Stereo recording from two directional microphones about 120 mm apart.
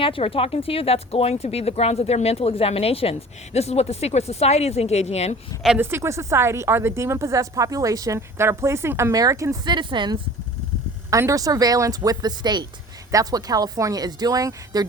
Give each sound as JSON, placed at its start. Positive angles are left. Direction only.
{"t": 0.0, "sound": "speech", "side_deg": 50}
{"t": 5.8, "sound": "a woman's voice", "side_deg": -20}
{"t": 9.6, "sound": "speech", "side_deg": -40}
{"t": 11.1, "sound": "a woman's voice", "side_deg": -25}